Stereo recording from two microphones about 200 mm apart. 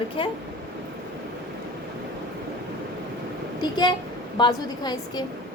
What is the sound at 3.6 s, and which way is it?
A woman's voice, 20° left (ahead or behind).